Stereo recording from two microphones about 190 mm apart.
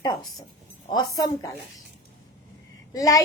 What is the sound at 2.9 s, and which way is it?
Speech, 20° left (ahead or behind).